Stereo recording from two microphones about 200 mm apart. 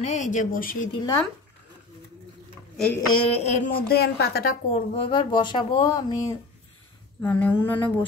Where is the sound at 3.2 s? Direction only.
30° left (ahead or behind); by 4.5 s 50° left (ahead or behind).